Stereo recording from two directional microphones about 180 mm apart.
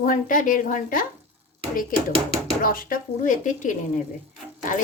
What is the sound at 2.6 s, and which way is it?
Speech, 50° left (ahead or behind).